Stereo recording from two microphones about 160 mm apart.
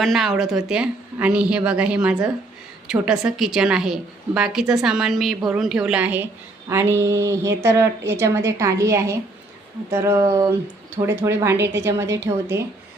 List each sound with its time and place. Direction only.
0.0 s a woman's voice: centre (ahead or behind)